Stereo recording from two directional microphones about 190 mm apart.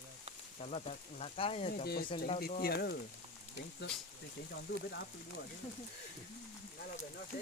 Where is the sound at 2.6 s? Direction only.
55° left (ahead or behind).